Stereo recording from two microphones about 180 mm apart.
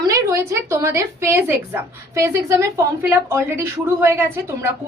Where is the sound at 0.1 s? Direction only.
15° right (ahead or behind).